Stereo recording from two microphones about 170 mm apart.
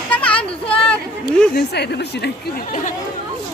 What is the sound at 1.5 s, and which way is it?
Speech, 75° left (ahead or behind).